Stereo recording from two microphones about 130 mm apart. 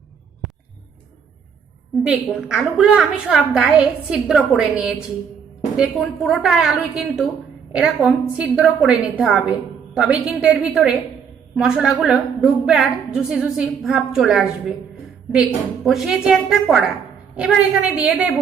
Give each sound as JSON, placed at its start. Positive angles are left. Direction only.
{"t": 2.0, "sound": "a woman's voice", "side_deg": -5}